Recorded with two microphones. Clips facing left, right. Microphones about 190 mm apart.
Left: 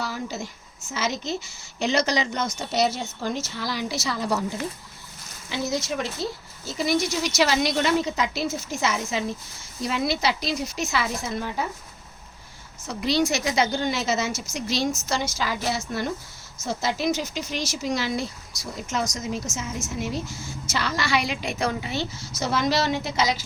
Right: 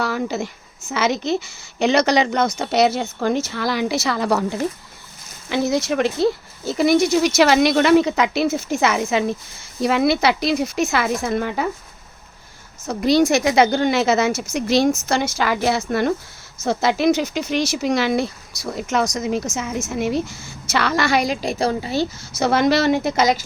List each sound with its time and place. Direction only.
0.0 s speech: 65° right (ahead or behind)
12.9 s a woman's voice: 45° right (ahead or behind)
22.4 s speech: 60° right (ahead or behind)